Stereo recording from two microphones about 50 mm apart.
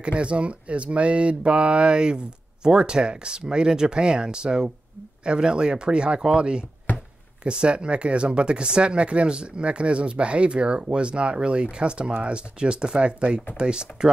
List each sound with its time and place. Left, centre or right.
0.0 s speech: right